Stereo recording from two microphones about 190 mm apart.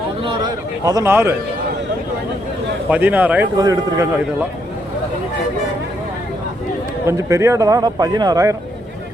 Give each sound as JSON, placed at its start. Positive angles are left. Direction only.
{"t": 0.9, "sound": "a man's voice", "side_deg": -15}
{"t": 2.9, "sound": "a man's voice", "side_deg": -10}
{"t": 7.0, "sound": "a man's voice", "side_deg": -15}